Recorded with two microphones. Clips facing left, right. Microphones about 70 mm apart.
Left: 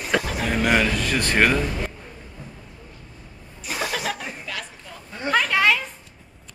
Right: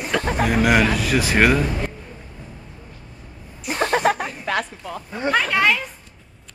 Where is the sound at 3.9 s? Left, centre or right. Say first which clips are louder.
Right 9 dB; right.